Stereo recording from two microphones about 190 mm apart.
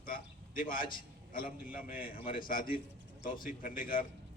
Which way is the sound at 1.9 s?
45° left (ahead or behind).